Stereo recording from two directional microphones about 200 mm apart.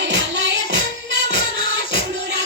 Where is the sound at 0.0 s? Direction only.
65° right (ahead or behind).